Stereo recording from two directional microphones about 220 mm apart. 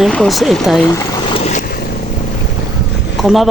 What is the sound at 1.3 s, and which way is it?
Vehicle, 30° left (ahead or behind).